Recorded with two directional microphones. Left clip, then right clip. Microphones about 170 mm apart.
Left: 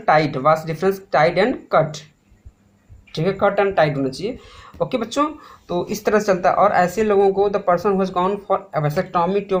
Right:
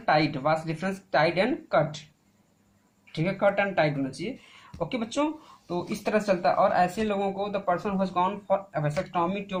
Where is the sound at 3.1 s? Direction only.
50° left (ahead or behind).